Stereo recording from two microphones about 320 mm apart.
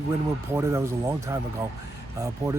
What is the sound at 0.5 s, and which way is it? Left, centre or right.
Speech, centre.